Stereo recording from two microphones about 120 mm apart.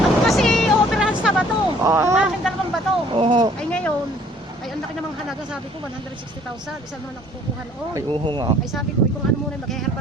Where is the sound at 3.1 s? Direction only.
45° right (ahead or behind).